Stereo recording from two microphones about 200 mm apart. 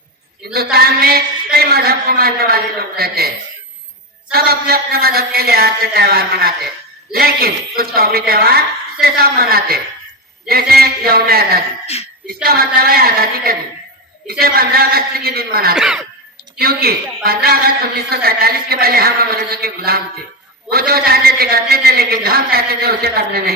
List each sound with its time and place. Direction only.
0.5 s a man's voice: 50° right (ahead or behind)
15.7 s a sound: 5° right (ahead or behind)
16.6 s a man's voice: 50° right (ahead or behind)